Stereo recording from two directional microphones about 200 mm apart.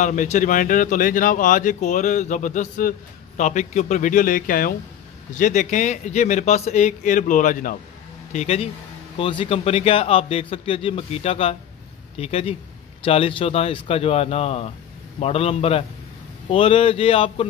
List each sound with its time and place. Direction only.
0.0 s a man's voice: 40° left (ahead or behind)